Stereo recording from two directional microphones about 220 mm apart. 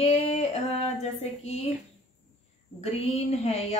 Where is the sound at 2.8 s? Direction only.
30° left (ahead or behind).